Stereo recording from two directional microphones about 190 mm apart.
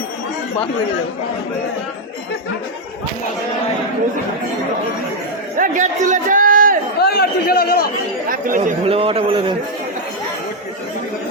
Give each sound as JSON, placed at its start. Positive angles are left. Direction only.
{"t": 5.5, "sound": "a man's voice", "side_deg": -45}
{"t": 7.0, "sound": "a sound", "side_deg": 55}
{"t": 8.3, "sound": "speech", "side_deg": -45}
{"t": 8.9, "sound": "a man's voice", "side_deg": -30}